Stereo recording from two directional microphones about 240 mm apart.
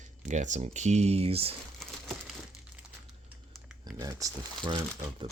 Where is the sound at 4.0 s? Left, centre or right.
Centre.